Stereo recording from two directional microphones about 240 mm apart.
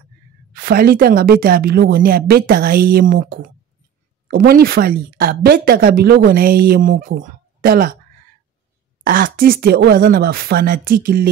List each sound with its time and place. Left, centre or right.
0.5 s a woman's voice: right
9.0 s a woman's voice: right